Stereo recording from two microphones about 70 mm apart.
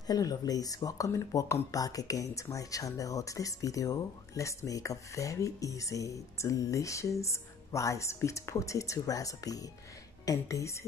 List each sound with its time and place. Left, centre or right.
0.0 s speech: left